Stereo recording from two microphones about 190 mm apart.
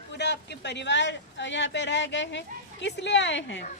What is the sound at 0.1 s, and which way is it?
A woman's voice, 65° left (ahead or behind).